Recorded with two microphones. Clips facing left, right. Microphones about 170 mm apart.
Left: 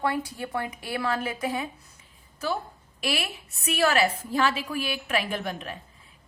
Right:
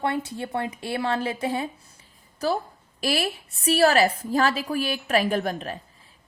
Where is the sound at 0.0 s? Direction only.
25° right (ahead or behind).